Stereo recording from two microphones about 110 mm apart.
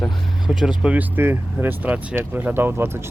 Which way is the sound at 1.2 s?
20° right (ahead or behind).